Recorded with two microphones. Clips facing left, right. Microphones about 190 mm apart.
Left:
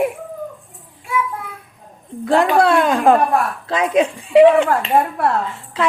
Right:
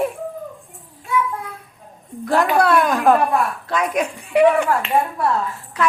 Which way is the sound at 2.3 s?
25° left (ahead or behind).